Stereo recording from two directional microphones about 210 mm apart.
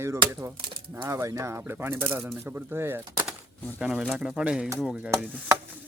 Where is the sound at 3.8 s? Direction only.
5° right (ahead or behind).